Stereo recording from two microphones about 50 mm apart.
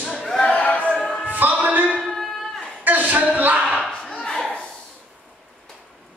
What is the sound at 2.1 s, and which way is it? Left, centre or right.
Music, centre.